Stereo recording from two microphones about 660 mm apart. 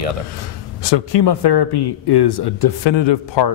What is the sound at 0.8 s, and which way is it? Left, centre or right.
Speech, left.